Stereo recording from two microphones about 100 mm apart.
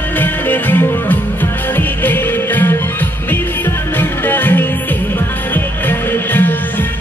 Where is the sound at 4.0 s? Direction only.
20° left (ahead or behind).